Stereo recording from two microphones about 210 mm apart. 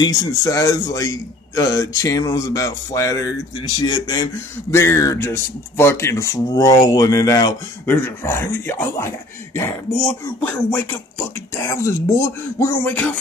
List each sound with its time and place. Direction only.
0.0 s a man's voice: 15° left (ahead or behind)